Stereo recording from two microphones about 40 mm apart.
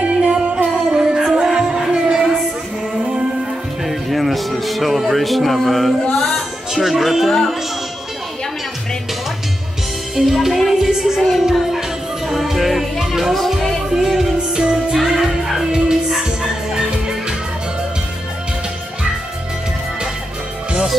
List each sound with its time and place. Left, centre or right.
0.1 s music: right
3.8 s music: centre
6.7 s speech: centre
10.1 s speech: centre
10.7 s music: centre
14.5 s music: centre
15.0 s music: centre